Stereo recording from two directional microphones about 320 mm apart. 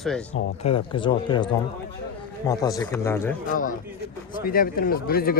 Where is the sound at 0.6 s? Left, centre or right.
Centre.